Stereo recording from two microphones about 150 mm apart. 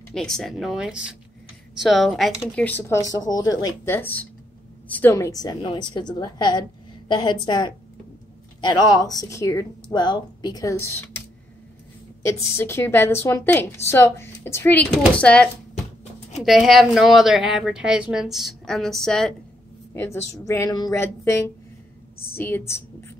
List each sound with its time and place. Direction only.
0.1 s a woman's voice: centre (ahead or behind)
2.6 s a woman's voice: 10° left (ahead or behind)
3.1 s a woman's voice: 25° left (ahead or behind)
12.2 s a woman's voice: 20° left (ahead or behind); by 19.3 s centre (ahead or behind)
19.9 s a woman's voice: 15° left (ahead or behind)